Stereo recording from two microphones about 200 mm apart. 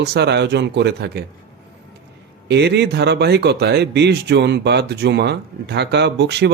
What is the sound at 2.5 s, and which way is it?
Speech, 55° right (ahead or behind).